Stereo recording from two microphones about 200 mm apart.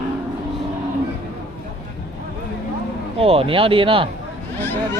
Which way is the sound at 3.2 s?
30° right (ahead or behind).